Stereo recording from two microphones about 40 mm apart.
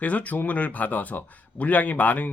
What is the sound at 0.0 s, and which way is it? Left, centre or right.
Speech, left.